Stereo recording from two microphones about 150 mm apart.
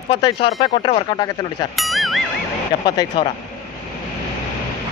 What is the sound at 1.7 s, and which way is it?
Music, centre (ahead or behind).